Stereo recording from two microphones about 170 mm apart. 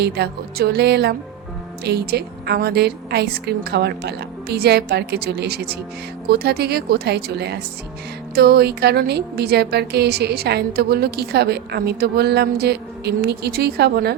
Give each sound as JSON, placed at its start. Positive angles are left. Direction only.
{"t": 0.0, "sound": "a woman's voice", "side_deg": -70}